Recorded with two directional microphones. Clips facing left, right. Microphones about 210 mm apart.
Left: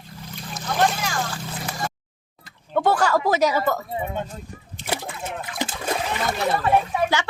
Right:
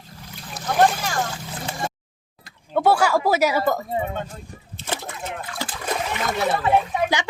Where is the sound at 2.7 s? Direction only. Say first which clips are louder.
Right 1 dB; 10° right (ahead or behind).